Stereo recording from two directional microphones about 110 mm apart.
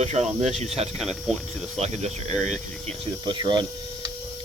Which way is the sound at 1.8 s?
90° right.